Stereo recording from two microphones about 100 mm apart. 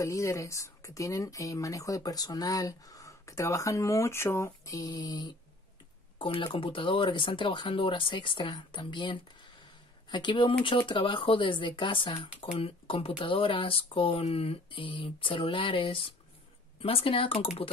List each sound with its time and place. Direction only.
0.0 s speech: 30° left (ahead or behind)
6.1 s speech: 55° left (ahead or behind)
12.5 s speech: 70° left (ahead or behind)